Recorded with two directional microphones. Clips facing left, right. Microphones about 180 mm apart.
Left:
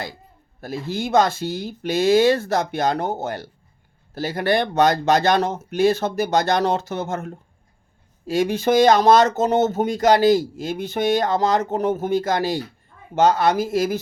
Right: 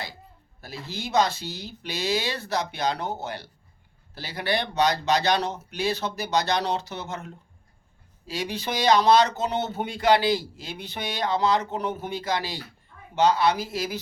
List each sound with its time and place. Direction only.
0.6 s speech: 50° left (ahead or behind)